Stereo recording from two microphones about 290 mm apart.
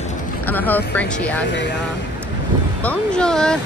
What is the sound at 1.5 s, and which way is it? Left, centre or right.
Speech, left.